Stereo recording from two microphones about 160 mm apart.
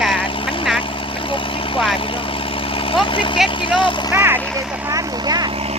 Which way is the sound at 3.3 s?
Centre (ahead or behind).